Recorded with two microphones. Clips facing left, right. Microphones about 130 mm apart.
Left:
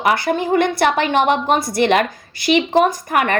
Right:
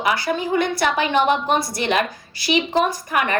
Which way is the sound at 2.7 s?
60° left (ahead or behind).